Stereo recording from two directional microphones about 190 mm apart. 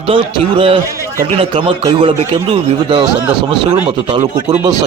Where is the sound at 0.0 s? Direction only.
30° right (ahead or behind).